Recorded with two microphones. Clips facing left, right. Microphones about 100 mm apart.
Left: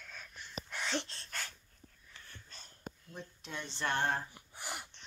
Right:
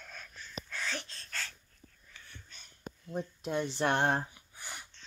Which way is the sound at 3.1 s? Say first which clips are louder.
Right 12 dB; 50° right (ahead or behind).